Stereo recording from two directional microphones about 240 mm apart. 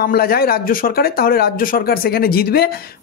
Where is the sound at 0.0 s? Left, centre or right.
Left.